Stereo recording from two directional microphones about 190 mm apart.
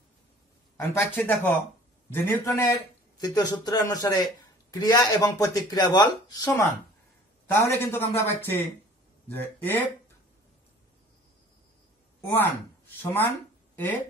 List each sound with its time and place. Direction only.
0.7 s a man's voice: 10° left (ahead or behind)
12.3 s speech: 10° left (ahead or behind)